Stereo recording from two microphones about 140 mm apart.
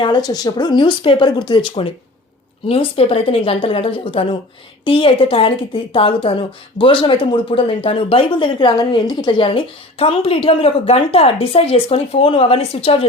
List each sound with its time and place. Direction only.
0.0 s a woman's voice: 30° left (ahead or behind)